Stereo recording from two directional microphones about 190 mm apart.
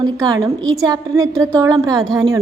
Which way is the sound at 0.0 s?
20° right (ahead or behind).